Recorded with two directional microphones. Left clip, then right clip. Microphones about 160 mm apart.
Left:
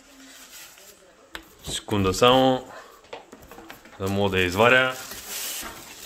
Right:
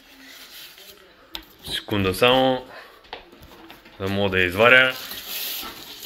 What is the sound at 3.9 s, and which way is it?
Speech, 20° left (ahead or behind).